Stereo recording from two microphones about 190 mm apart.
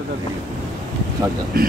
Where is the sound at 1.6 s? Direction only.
50° right (ahead or behind).